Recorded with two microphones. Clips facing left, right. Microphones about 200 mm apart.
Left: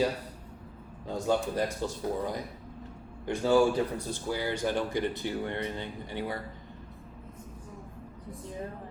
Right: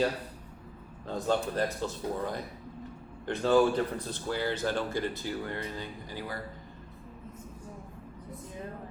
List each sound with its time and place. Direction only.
1.0 s speech: 10° left (ahead or behind)